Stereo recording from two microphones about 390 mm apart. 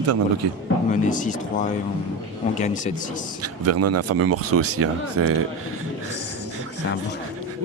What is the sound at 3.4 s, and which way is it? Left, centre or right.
Speech, right.